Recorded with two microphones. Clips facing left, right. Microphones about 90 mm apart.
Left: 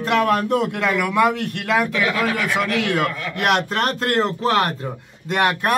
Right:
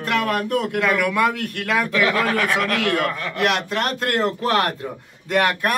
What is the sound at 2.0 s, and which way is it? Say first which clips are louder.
Speech: right 1 dB; 50° right (ahead or behind).